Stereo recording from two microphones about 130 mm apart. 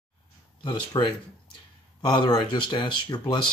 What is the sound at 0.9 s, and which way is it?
Speech, 35° left (ahead or behind).